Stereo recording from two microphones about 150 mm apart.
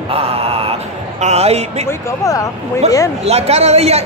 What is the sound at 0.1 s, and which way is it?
Mantra, 40° right (ahead or behind).